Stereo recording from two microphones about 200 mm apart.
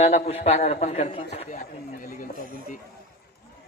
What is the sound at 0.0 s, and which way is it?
A man's voice, 30° left (ahead or behind).